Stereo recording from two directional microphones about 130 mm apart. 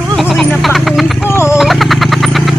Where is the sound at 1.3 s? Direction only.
20° left (ahead or behind).